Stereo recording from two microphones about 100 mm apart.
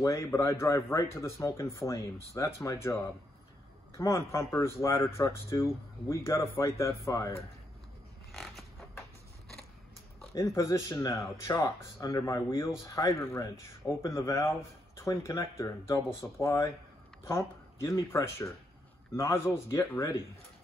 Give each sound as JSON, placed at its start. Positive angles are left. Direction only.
{"t": 0.0, "sound": "speech", "side_deg": 30}
{"t": 8.3, "sound": "a sound", "side_deg": 0}
{"t": 10.3, "sound": "speech", "side_deg": 30}